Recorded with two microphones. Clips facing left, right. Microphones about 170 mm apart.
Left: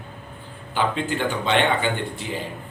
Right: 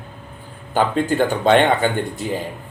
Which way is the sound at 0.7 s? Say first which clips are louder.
Right 6 dB; 45° right (ahead or behind).